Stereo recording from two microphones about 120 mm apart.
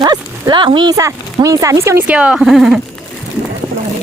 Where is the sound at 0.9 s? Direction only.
25° right (ahead or behind).